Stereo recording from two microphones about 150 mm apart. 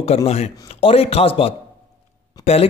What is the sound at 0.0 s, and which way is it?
Speech, 40° left (ahead or behind).